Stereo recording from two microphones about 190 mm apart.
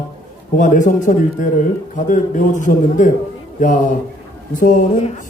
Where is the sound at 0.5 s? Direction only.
40° left (ahead or behind).